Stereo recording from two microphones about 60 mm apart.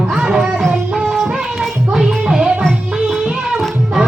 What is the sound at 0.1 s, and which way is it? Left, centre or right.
Music, centre.